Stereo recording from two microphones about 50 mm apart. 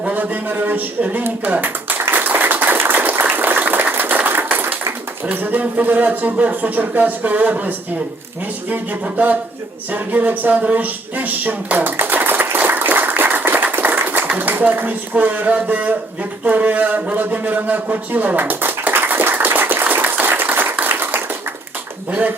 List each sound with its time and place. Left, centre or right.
0.0 s speech: right
2.0 s applause: right
3.9 s a sound: right
5.2 s speech: right
8.7 s speech: right
10.6 s a sound: right
14.3 s speech: right
20.2 s applause: right
20.8 s clapping: right